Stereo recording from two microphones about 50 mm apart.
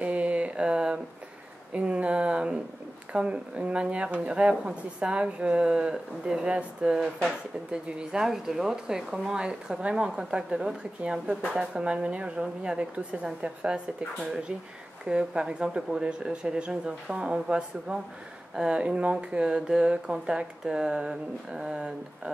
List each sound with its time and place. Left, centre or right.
0.0 s a sound: right
1.7 s speech: right
15.0 s speech: centre